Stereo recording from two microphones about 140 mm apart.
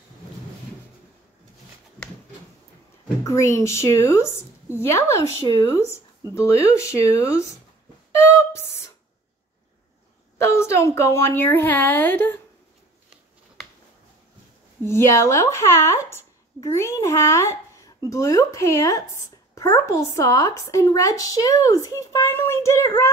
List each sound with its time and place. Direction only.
3.3 s a woman's voice: 20° left (ahead or behind)
8.2 s a sound: 20° left (ahead or behind)
10.3 s a woman's voice: 20° left (ahead or behind)
14.9 s a woman's voice: 20° left (ahead or behind)
16.6 s a woman's voice: 20° left (ahead or behind)